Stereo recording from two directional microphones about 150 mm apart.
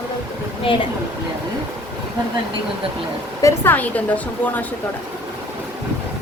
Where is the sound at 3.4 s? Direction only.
15° left (ahead or behind).